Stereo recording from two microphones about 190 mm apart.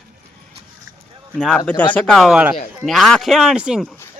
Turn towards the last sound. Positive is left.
turn(degrees=-5)  # may be behind; listen again after turning